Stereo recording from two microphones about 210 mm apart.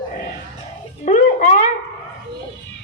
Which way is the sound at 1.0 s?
35° left (ahead or behind).